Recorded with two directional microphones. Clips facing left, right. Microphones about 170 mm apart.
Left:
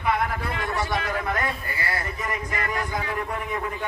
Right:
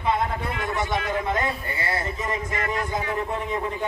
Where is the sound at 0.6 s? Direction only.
20° right (ahead or behind).